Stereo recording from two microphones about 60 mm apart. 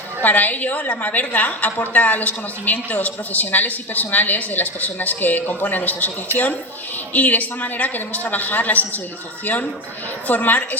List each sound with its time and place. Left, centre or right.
0.2 s a woman's voice: left
7.1 s a woman's voice: left
10.2 s a woman's voice: left